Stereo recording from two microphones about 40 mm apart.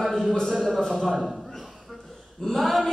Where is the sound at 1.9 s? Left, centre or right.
Centre.